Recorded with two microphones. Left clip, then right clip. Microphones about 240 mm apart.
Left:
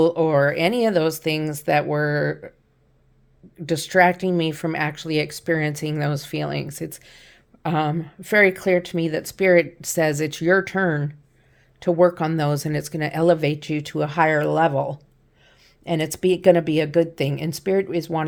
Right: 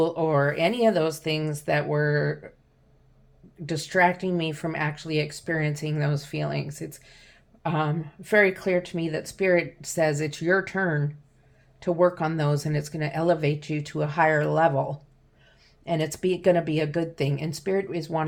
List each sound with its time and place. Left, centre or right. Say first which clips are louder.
0.0 s speech: left 5 dB; left
3.7 s speech: left 5 dB; left